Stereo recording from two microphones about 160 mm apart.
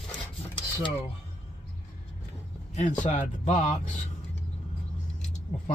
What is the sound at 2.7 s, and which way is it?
Speech, 50° left (ahead or behind).